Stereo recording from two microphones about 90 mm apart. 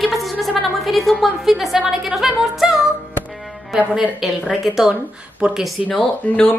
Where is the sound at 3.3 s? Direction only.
Centre (ahead or behind).